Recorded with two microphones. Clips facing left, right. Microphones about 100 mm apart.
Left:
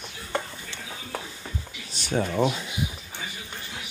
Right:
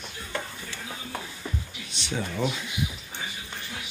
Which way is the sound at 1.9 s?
45° left (ahead or behind).